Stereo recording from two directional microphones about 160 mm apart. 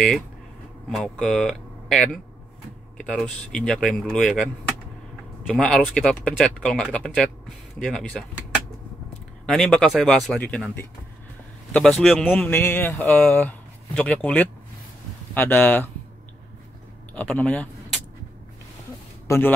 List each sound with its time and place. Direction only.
0.9 s speech: 5° left (ahead or behind)
5.5 s speech: 5° left (ahead or behind)
9.5 s a man's voice: 5° left (ahead or behind)
17.1 s a sound: 10° left (ahead or behind)
19.2 s speech: 15° left (ahead or behind)